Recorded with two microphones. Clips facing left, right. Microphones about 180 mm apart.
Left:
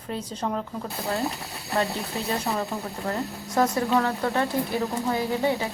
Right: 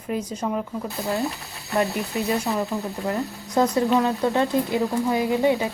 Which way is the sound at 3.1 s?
20° right (ahead or behind).